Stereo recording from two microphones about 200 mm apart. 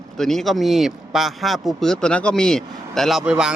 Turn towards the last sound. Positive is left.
turn(degrees=-5)  # may be behind; listen again after turning